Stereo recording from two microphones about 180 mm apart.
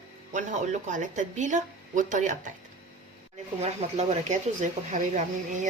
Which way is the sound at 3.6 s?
35° right (ahead or behind).